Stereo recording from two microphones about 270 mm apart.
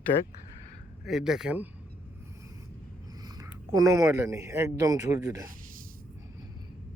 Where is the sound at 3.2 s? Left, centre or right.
Centre.